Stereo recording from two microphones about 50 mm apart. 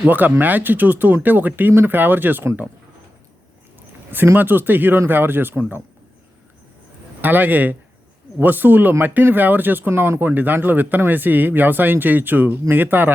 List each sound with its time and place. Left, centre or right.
0.1 s speech: right
4.4 s speech: right
7.2 s speech: right